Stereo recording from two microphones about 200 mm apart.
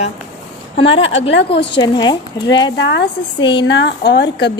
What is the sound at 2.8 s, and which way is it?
Speech, 60° left (ahead or behind).